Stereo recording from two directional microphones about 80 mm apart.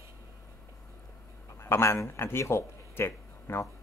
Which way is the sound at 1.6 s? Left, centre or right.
Left.